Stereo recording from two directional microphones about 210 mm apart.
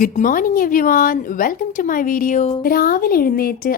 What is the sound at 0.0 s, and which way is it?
A woman's voice, 40° left (ahead or behind).